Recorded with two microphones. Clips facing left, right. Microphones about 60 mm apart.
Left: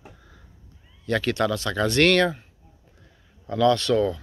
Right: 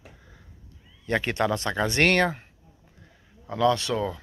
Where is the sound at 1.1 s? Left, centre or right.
Right.